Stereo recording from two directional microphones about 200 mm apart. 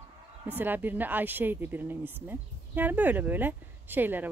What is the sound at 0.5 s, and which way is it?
Speech, 10° right (ahead or behind).